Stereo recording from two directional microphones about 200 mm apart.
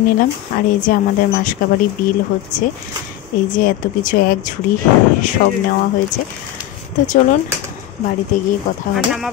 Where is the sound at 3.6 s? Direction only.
45° left (ahead or behind).